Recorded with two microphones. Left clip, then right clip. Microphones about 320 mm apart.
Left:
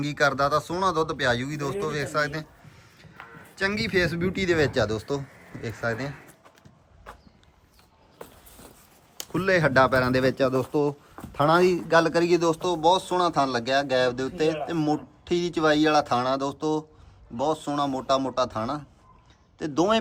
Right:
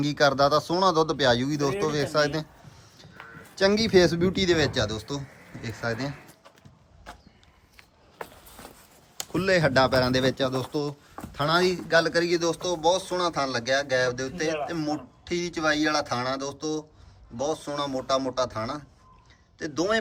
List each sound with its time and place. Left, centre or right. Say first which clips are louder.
0.0 s a man's voice: right 2 dB; centre
8.2 s a sound: right 5 dB; centre
9.3 s a man's voice: left 1 dB; centre